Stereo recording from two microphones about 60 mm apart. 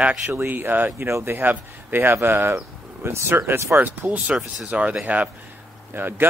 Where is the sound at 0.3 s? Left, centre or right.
Right.